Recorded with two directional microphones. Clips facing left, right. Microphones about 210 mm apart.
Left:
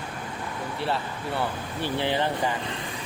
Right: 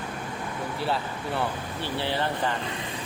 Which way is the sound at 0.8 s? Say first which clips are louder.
Even; centre (ahead or behind).